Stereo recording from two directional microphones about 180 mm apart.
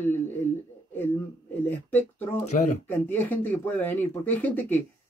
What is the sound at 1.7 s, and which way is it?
Speech, 10° left (ahead or behind).